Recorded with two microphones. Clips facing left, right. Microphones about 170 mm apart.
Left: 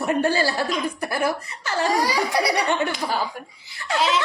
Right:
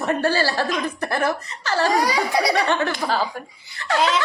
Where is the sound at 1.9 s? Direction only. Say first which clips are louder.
Left 1 dB; 20° right (ahead or behind).